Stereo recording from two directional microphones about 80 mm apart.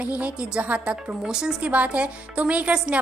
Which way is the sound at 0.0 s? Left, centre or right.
Centre.